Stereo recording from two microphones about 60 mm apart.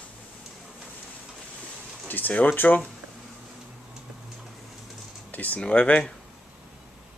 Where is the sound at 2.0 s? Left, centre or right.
Left.